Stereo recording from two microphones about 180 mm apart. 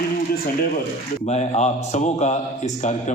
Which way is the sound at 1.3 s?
40° left (ahead or behind).